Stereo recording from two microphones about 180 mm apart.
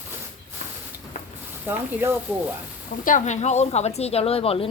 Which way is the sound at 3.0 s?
45° left (ahead or behind).